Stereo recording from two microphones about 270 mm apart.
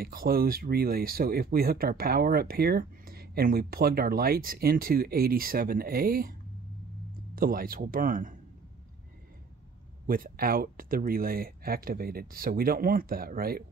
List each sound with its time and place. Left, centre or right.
0.0 s speech: right
7.3 s speech: right
10.0 s speech: right